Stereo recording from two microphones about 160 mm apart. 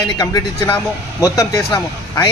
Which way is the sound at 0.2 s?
20° left (ahead or behind).